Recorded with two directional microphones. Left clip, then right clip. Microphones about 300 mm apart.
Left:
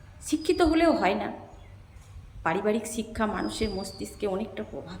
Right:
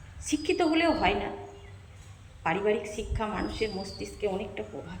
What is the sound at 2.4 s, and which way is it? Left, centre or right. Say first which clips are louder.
A woman's voice: left 1 dB; centre.